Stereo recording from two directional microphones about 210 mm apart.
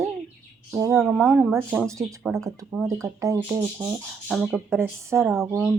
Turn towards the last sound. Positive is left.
turn(degrees=-5)  # may be behind; listen again after turning